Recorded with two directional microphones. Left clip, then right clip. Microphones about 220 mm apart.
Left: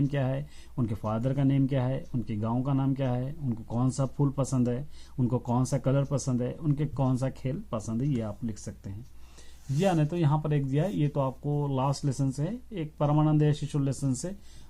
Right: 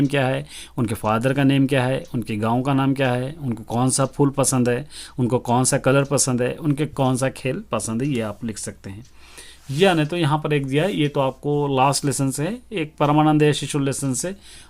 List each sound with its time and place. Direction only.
0.1 s speech: 30° right (ahead or behind)